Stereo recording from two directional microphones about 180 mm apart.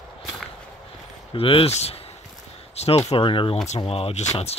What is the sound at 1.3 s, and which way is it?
Speech, 30° left (ahead or behind).